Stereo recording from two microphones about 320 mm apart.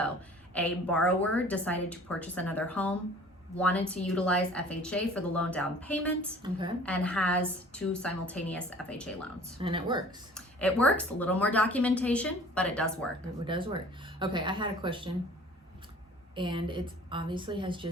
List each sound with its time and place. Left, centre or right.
0.5 s a woman's voice: centre
6.4 s a woman's voice: centre
6.8 s a woman's voice: centre
9.6 s a woman's voice: centre
10.3 s a woman's voice: centre
13.4 s a woman's voice: centre
16.3 s a woman's voice: centre